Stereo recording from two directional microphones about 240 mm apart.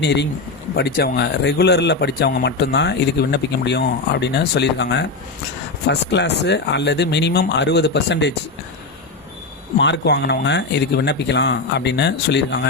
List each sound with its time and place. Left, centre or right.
0.0 s speech: left
9.7 s speech: left